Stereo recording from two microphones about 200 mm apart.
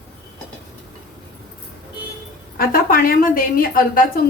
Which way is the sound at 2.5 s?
45° left (ahead or behind).